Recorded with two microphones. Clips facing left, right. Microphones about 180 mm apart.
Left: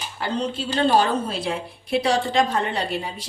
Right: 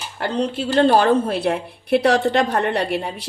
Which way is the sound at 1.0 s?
60° right (ahead or behind).